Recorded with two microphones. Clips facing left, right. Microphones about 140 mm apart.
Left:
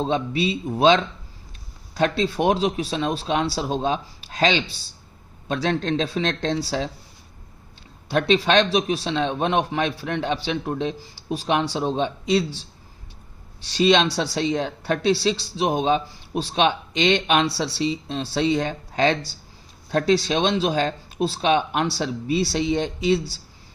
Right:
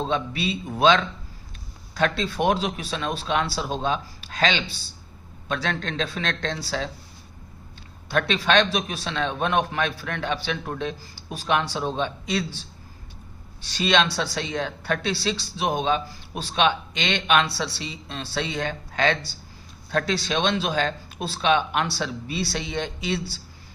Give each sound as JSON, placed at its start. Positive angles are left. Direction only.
{"t": 0.1, "sound": "speech", "side_deg": 30}
{"t": 8.1, "sound": "a man's voice", "side_deg": 30}